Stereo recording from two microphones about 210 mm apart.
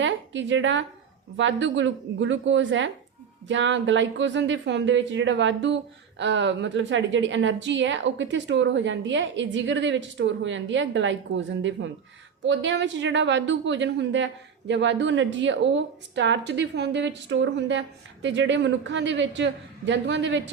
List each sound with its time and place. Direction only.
0.0 s a woman's voice: 60° right (ahead or behind)